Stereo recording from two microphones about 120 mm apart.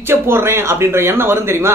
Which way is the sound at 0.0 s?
20° right (ahead or behind).